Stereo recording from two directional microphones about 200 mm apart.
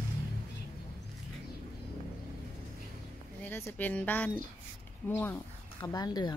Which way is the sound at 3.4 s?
10° left (ahead or behind).